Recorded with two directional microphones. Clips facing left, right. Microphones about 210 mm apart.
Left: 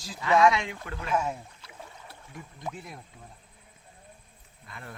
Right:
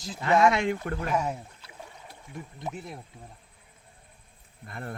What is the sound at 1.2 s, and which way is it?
Rowboat, 10° right (ahead or behind).